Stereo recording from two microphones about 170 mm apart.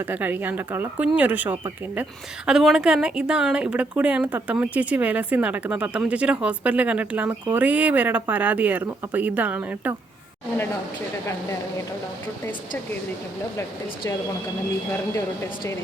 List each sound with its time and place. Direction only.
0.0 s a woman's voice: 10° right (ahead or behind)
15.1 s speech: 15° left (ahead or behind)